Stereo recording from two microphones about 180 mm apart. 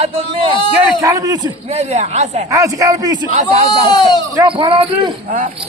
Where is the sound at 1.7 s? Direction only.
35° right (ahead or behind).